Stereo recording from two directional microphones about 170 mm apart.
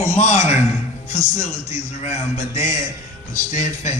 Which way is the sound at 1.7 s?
40° left (ahead or behind).